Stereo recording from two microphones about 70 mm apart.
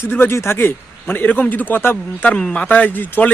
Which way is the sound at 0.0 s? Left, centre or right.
Left.